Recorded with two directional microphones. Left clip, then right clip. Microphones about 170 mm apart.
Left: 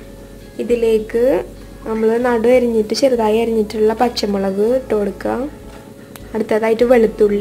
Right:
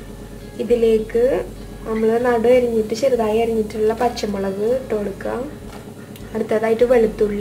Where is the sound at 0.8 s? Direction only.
60° left (ahead or behind).